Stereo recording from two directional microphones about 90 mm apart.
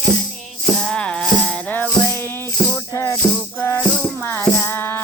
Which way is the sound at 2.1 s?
25° left (ahead or behind).